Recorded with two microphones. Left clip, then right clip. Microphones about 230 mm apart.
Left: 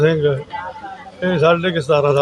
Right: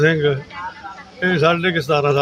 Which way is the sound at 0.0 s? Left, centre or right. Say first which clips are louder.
Left 1 dB; centre.